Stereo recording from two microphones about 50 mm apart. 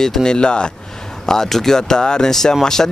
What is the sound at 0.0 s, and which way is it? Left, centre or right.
Speech, centre.